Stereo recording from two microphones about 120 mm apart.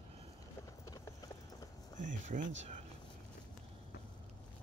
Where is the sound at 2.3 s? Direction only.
70° right (ahead or behind).